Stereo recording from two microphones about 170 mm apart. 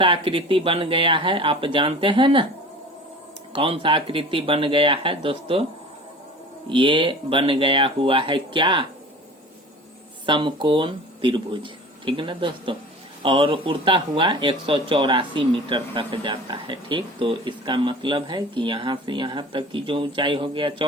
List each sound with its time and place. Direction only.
0.0 s speech: 30° right (ahead or behind)
3.5 s speech: 30° right (ahead or behind)
6.7 s speech: 30° right (ahead or behind)
10.2 s speech: 30° right (ahead or behind)